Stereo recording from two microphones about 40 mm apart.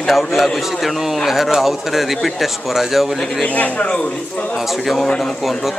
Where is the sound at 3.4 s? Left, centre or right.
Left.